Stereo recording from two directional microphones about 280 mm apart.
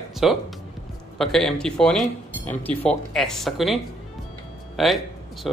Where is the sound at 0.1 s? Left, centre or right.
Centre.